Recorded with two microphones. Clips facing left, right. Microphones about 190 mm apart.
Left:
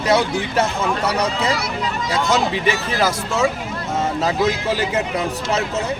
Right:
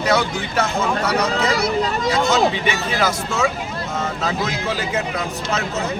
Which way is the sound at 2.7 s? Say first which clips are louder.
Left 1 dB; 30° left (ahead or behind).